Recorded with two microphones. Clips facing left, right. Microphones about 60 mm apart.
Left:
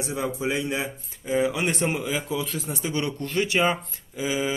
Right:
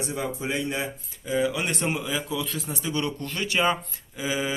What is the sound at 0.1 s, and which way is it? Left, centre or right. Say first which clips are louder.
Speech: left 5 dB; centre.